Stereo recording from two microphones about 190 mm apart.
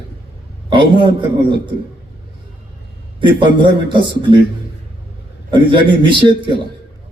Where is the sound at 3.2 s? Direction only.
25° right (ahead or behind).